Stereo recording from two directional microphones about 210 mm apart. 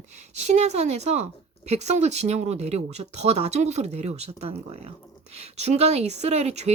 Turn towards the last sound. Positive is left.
turn(degrees=-30)  # may be behind; listen again after turning